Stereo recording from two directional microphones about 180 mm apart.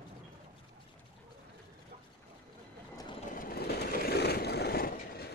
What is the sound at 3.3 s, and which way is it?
Train, 55° left (ahead or behind).